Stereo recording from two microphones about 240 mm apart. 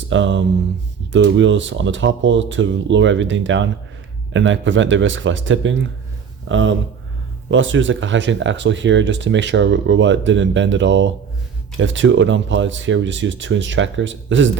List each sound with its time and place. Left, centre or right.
0.1 s speech: right